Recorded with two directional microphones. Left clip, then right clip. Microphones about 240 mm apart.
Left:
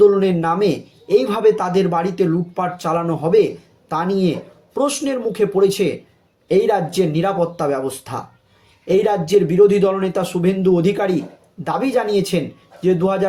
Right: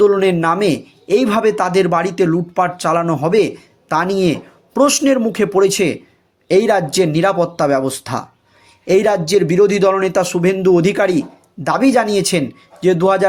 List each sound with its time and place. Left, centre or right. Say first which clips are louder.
0.0 s a man's voice: right 1 dB; right